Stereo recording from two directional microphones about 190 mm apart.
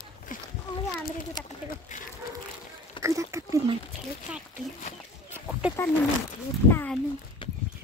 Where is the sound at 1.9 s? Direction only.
40° left (ahead or behind).